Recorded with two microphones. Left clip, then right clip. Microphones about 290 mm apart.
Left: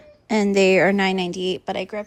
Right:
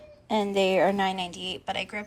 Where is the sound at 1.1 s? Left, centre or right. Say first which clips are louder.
Left 8 dB; left.